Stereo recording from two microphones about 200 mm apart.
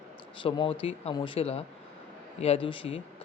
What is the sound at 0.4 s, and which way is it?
Speech, 25° left (ahead or behind).